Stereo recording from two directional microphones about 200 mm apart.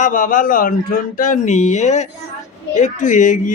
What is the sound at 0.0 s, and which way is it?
Speech, 40° left (ahead or behind).